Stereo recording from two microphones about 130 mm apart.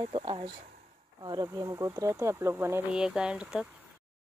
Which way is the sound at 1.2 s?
35° right (ahead or behind).